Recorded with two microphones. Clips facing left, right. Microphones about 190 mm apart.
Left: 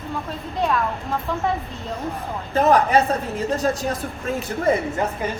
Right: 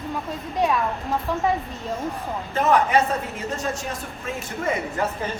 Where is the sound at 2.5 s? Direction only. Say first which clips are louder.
Left 3 dB; 35° left (ahead or behind).